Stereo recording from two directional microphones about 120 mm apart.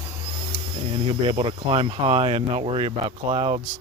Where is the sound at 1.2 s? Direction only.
50° right (ahead or behind).